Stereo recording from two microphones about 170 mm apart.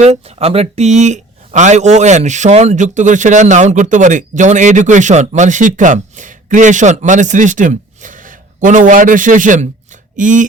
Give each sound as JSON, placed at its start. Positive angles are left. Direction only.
{"t": 0.0, "sound": "speech", "side_deg": -40}